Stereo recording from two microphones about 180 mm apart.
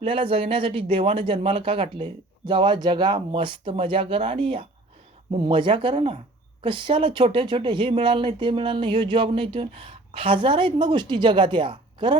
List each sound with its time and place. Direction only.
0.0 s speech: 30° right (ahead or behind)